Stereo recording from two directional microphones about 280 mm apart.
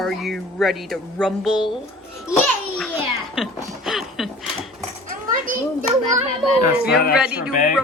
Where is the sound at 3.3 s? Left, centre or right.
Centre.